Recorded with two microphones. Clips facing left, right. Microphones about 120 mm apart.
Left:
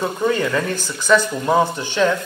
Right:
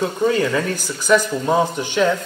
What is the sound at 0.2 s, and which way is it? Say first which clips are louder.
Speech: right 1 dB; 15° right (ahead or behind).